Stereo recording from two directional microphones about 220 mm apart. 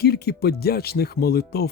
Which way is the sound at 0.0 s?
45° left (ahead or behind).